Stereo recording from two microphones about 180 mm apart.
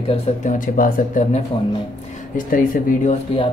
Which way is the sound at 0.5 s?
50° left (ahead or behind).